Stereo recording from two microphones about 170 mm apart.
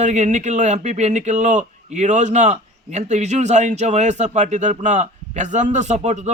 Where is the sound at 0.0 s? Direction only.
45° right (ahead or behind).